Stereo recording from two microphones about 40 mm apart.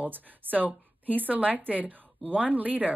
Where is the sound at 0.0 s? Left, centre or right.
Right.